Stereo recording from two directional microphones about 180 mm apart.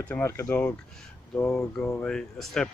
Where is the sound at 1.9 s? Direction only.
5° left (ahead or behind).